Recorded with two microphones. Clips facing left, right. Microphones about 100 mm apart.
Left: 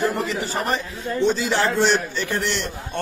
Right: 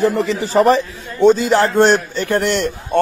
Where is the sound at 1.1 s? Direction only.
45° right (ahead or behind).